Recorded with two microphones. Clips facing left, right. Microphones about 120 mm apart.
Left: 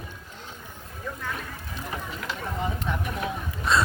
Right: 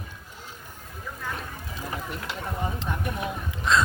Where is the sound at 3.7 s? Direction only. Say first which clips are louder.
Right 1 dB; 5° left (ahead or behind).